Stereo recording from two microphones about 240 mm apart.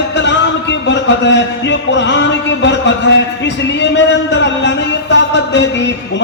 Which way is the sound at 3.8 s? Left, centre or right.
Left.